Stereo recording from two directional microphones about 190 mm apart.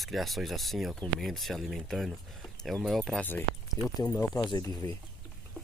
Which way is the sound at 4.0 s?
20° left (ahead or behind).